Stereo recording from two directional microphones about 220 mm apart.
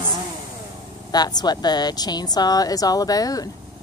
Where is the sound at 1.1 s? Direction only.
20° left (ahead or behind).